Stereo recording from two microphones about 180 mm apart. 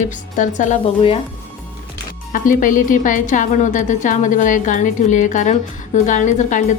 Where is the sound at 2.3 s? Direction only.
50° left (ahead or behind).